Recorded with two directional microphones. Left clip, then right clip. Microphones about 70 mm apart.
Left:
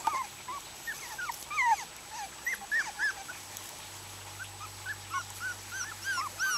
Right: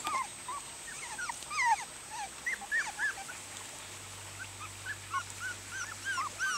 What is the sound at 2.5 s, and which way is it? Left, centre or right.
Dog, centre.